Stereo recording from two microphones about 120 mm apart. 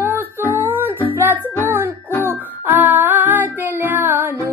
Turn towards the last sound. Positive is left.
turn(degrees=-15)  # may be behind; listen again after turning